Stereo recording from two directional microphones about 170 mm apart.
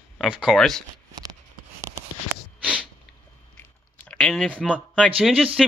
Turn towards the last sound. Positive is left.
turn(degrees=-5)  # may be behind; listen again after turning